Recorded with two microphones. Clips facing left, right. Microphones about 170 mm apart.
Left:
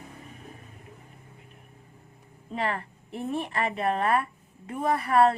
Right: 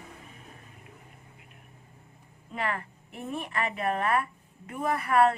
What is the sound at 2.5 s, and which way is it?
A woman's voice, 30° left (ahead or behind).